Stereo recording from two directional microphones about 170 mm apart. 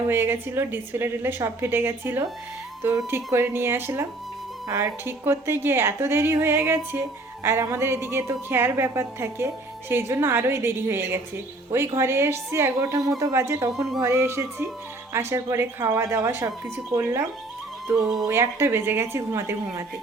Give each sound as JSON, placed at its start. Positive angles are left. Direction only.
{"t": 0.1, "sound": "a woman's voice", "side_deg": -15}
{"t": 3.3, "sound": "a woman's voice", "side_deg": -15}